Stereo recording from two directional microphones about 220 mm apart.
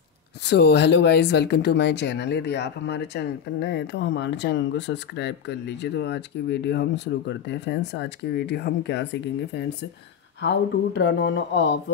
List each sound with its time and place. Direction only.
0.5 s speech: 50° left (ahead or behind)